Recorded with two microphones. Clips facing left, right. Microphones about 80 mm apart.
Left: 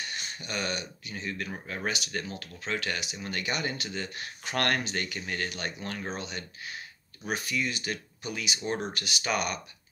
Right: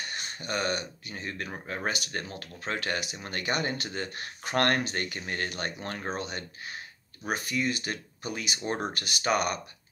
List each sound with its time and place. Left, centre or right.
0.0 s speech: right
1.5 s speech: right
1.9 s speech: right